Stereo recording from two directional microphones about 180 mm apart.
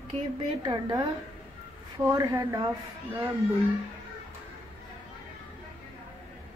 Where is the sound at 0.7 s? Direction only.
20° right (ahead or behind).